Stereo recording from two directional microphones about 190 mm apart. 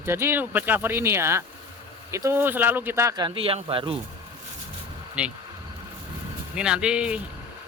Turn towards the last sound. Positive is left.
turn(degrees=-5)  # may be behind; listen again after turning